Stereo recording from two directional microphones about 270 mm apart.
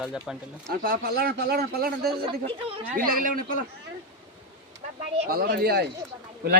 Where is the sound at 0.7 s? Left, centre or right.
Right.